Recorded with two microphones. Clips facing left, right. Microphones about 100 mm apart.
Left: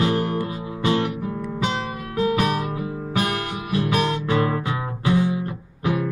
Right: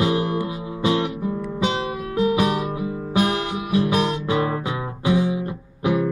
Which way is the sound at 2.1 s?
15° right (ahead or behind).